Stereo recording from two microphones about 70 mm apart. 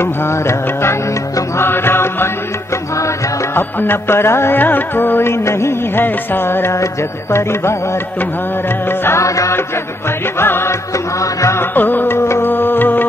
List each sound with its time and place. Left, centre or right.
0.0 s music: left
3.5 s music: left
9.0 s music: left
10.4 s music: left
11.1 s music: left
11.7 s music: left